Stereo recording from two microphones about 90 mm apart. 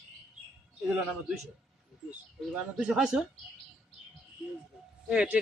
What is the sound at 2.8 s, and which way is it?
Speech, 10° right (ahead or behind).